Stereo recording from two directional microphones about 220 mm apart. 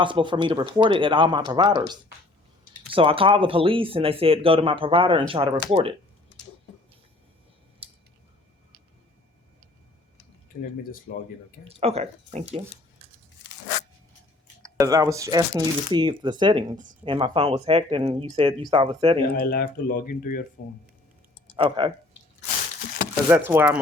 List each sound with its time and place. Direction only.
0.0 s speech: 20° right (ahead or behind)
7.8 s a sound: 25° right (ahead or behind)
11.1 s speech: 40° left (ahead or behind)
11.7 s speech: 25° right (ahead or behind)
14.8 s speech: 15° right (ahead or behind)
19.4 s speech: 40° left (ahead or behind)
21.5 s speech: 25° right (ahead or behind)
23.3 s speech: 10° right (ahead or behind)